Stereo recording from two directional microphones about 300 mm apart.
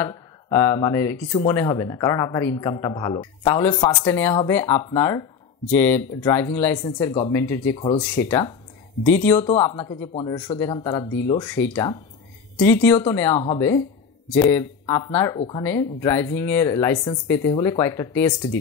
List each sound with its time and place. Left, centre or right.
0.0 s speech: centre